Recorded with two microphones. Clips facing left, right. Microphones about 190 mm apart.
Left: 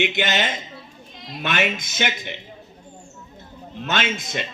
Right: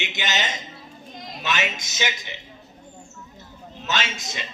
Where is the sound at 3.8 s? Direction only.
55° left (ahead or behind).